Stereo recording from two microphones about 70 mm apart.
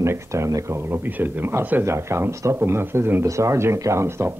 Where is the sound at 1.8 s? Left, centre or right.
Right.